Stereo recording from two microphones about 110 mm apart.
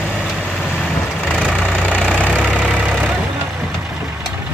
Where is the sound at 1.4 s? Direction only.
10° right (ahead or behind).